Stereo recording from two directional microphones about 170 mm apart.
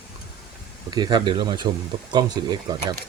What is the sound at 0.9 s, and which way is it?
Speech, 25° right (ahead or behind).